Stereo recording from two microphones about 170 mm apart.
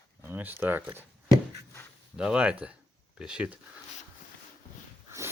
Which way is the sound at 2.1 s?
5° right (ahead or behind).